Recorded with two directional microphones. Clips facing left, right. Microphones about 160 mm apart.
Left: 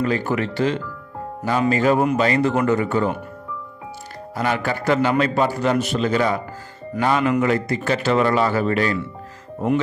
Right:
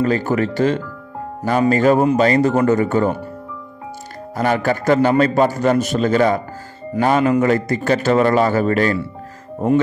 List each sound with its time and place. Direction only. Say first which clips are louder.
0.0 s a man's voice: right 4 dB; 40° right (ahead or behind)
4.4 s a man's voice: right 5 dB; 45° right (ahead or behind)